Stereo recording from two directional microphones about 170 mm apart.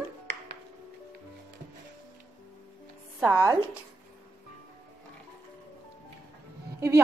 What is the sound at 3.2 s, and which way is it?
Speech, 15° right (ahead or behind).